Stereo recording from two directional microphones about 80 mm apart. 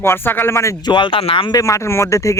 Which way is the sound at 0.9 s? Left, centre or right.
Left.